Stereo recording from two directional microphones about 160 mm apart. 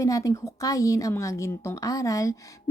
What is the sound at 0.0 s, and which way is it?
A woman's voice, 20° left (ahead or behind).